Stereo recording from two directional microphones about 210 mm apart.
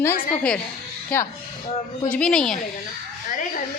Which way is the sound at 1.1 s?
5° left (ahead or behind).